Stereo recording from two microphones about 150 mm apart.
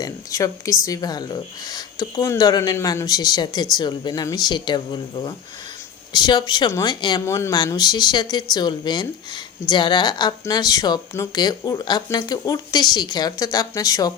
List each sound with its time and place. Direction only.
0.0 s speech: 20° left (ahead or behind)